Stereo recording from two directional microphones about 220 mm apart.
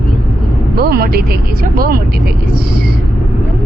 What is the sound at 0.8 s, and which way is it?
Speech, 45° right (ahead or behind).